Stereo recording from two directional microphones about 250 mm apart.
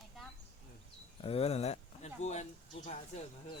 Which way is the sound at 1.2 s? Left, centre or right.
Left.